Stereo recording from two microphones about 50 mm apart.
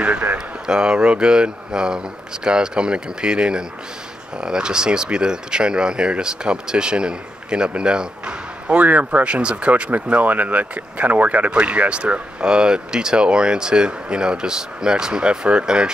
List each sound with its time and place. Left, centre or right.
0.0 s a sound: right
0.7 s speech: centre
8.8 s speech: right